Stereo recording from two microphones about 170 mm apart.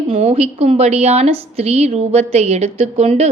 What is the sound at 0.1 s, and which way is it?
A woman's voice, 35° right (ahead or behind).